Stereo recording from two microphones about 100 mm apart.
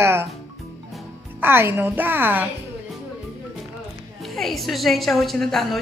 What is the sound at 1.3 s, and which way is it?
A woman's voice, 20° right (ahead or behind).